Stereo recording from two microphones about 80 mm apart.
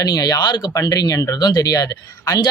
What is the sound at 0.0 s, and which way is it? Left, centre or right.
Speech, left.